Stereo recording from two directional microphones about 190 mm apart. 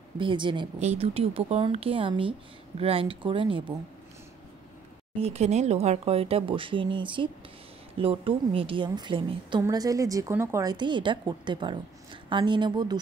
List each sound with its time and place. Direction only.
0.2 s a woman's voice: 25° right (ahead or behind)
5.2 s a woman's voice: 35° right (ahead or behind)